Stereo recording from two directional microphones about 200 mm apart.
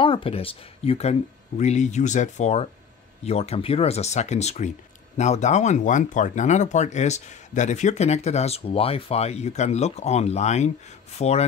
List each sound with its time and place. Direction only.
0.0 s speech: 25° left (ahead or behind)